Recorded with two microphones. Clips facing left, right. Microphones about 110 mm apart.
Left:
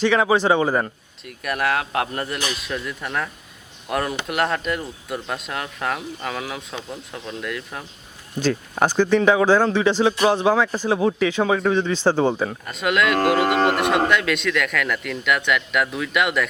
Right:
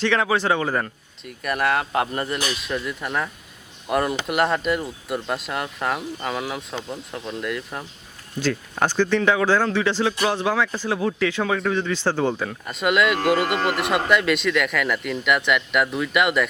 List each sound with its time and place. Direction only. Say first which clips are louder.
0.0 s speech: left 3 dB; 15° left (ahead or behind)
1.2 s speech: even; centre (ahead or behind)
8.4 s speech: left 2 dB; 15° left (ahead or behind)
12.6 s speech: right 1 dB; centre (ahead or behind)
13.1 s speech: left 2 dB; 55° left (ahead or behind)
13.7 s speech: left 2 dB; centre (ahead or behind)